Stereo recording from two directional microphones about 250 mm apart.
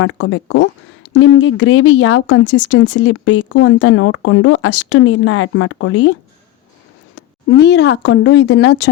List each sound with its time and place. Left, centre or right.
0.0 s speech: left
7.2 s speech: left